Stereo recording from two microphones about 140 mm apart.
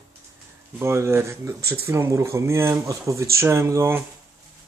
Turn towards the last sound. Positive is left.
turn(degrees=-20)  # may be behind; listen again after turning